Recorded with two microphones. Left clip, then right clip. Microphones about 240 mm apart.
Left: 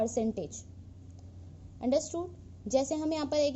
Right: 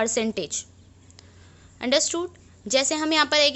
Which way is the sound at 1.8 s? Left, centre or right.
Centre.